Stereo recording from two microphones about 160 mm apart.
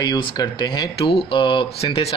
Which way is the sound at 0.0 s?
25° left (ahead or behind).